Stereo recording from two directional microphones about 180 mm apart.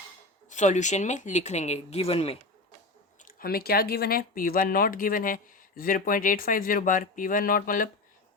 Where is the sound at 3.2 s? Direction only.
55° left (ahead or behind).